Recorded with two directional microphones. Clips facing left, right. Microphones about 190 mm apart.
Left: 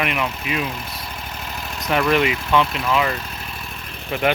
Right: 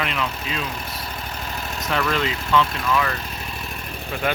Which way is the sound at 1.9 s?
15° left (ahead or behind).